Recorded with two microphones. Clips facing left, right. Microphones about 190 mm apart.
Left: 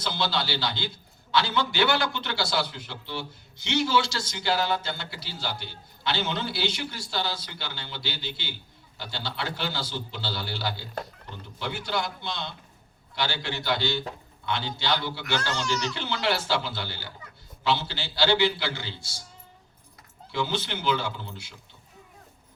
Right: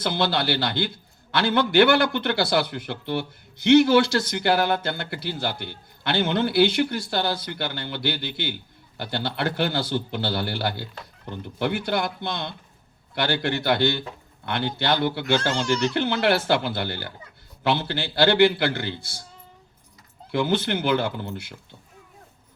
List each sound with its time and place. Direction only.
0.0 s a man's voice: 55° right (ahead or behind)
20.3 s a man's voice: 55° right (ahead or behind)